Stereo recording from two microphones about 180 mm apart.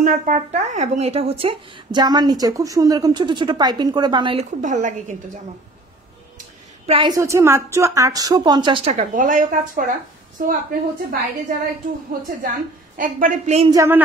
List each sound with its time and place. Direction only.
0.0 s speech: 45° right (ahead or behind); by 4.5 s 30° right (ahead or behind)
4.6 s a woman's voice: 45° right (ahead or behind)
6.9 s speech: 25° right (ahead or behind)
7.2 s speech: 15° right (ahead or behind); by 9.0 s 30° right (ahead or behind)
9.1 s a woman's voice: 45° right (ahead or behind)
13.7 s speech: 15° right (ahead or behind)